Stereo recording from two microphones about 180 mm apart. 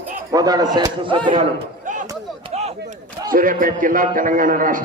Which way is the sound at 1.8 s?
45° right (ahead or behind).